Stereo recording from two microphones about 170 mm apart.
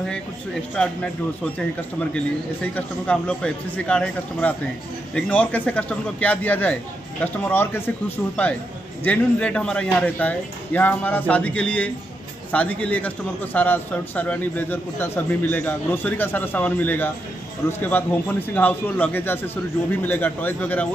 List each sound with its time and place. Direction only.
0.8 s a man's voice: 5° left (ahead or behind)
2.1 s a man's voice: 10° left (ahead or behind)
9.0 s a man's voice: 10° left (ahead or behind)